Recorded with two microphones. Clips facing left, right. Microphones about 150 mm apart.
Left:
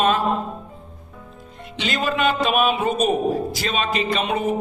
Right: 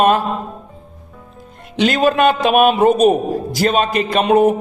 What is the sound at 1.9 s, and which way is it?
Speech, 50° right (ahead or behind).